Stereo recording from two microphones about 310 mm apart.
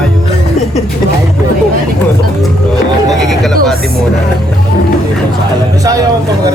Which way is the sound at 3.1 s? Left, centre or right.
Centre.